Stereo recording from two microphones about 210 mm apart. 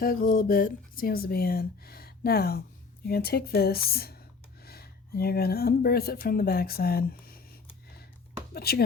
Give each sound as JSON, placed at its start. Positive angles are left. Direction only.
{"t": 0.0, "sound": "speech", "side_deg": 40}